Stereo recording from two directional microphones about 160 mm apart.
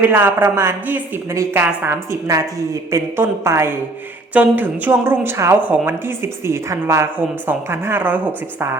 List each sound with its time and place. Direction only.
0.0 s a woman's voice: 10° right (ahead or behind)